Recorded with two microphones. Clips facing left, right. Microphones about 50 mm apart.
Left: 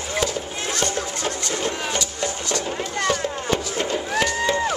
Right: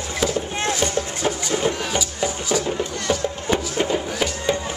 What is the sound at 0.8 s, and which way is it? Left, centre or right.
Music, centre.